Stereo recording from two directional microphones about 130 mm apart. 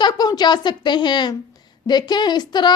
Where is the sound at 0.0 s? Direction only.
35° left (ahead or behind).